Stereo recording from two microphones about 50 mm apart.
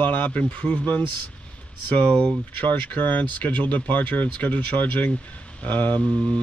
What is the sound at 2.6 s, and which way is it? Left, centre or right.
Speech, left.